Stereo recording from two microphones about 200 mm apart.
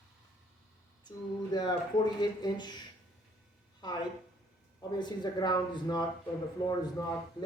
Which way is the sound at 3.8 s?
20° left (ahead or behind).